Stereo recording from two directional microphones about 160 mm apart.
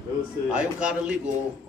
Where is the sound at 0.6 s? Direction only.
5° right (ahead or behind).